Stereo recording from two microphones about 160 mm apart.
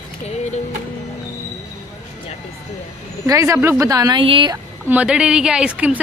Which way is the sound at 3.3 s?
20° right (ahead or behind).